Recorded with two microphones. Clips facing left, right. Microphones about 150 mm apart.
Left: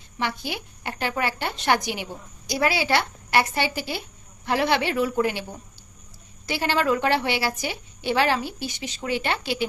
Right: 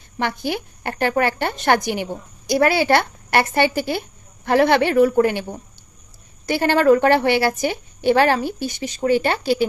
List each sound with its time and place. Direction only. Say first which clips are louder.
0.2 s a woman's voice: right 6 dB; 50° right (ahead or behind)